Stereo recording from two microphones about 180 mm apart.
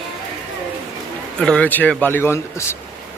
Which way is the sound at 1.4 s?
5° left (ahead or behind).